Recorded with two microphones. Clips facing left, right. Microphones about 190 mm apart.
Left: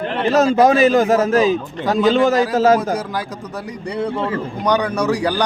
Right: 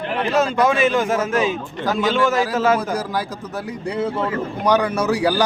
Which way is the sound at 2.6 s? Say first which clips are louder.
Left 5 dB; 40° left (ahead or behind).